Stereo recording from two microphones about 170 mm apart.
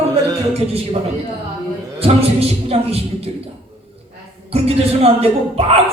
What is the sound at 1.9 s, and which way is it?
A man's voice, 35° right (ahead or behind).